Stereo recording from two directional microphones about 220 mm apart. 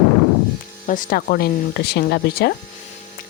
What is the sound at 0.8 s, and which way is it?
Speech, 35° left (ahead or behind).